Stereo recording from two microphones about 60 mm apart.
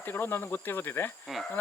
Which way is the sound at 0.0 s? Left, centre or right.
Left.